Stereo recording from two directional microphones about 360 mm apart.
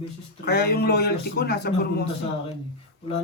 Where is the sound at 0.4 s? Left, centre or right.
Left.